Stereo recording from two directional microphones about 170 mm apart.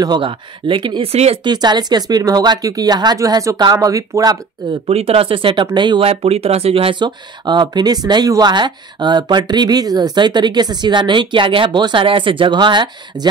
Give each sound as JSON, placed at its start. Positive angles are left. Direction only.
{"t": 0.0, "sound": "speech", "side_deg": -25}
{"t": 4.8, "sound": "speech", "side_deg": -35}